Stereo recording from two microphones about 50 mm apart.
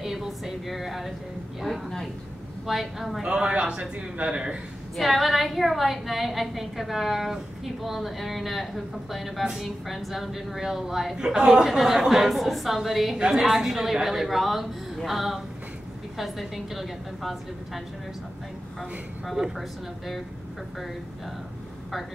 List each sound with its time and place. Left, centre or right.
0.0 s a sound: centre
2.6 s a woman's voice: centre
3.2 s speech: centre
4.9 s a woman's voice: centre